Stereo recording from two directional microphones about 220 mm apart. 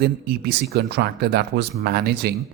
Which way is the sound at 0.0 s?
45° right (ahead or behind).